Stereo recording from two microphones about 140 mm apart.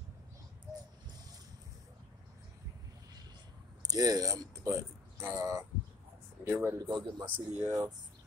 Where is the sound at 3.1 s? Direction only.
30° right (ahead or behind).